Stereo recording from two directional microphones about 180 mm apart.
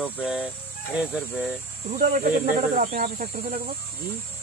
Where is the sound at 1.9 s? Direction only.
50° right (ahead or behind).